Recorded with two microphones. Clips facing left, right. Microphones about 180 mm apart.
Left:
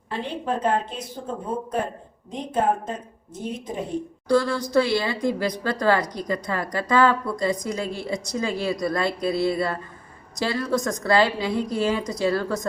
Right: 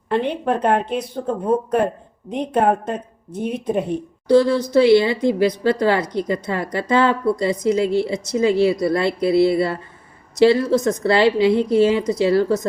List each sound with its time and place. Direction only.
0.1 s speech: 65° right (ahead or behind)
4.3 s speech: 20° right (ahead or behind)